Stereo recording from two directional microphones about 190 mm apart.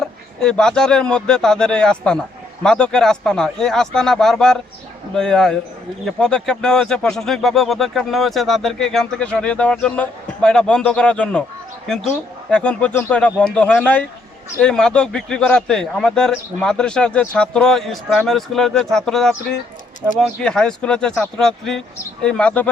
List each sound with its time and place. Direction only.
0.0 s speech: 5° left (ahead or behind)
12.5 s speech: 5° left (ahead or behind)